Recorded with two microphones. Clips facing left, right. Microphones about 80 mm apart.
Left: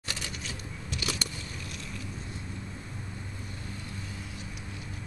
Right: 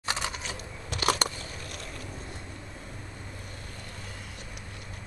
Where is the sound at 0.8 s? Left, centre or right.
Right.